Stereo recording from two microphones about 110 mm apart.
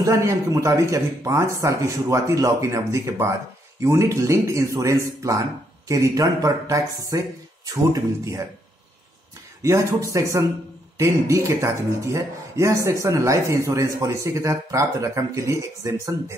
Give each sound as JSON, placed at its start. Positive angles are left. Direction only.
{"t": 0.0, "sound": "speech", "side_deg": -25}
{"t": 9.6, "sound": "speech", "side_deg": -25}